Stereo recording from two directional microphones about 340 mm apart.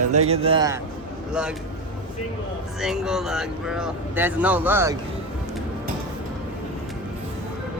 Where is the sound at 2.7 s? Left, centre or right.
Centre.